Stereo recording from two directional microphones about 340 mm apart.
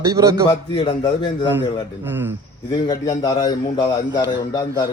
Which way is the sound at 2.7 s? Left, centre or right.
Centre.